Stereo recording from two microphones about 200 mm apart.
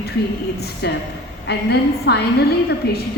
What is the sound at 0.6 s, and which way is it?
A woman's voice, 55° left (ahead or behind).